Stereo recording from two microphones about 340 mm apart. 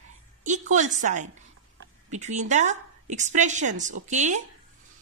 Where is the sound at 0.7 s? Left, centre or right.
Right.